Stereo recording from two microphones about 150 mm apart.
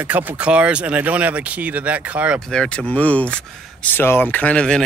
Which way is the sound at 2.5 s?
5° left (ahead or behind).